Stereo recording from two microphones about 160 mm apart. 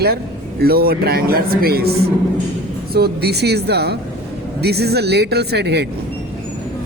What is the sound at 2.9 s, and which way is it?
Speech, 85° right.